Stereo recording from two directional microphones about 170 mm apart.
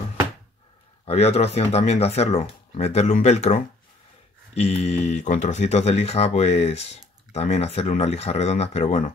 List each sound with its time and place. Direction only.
1.0 s speech: 40° left (ahead or behind)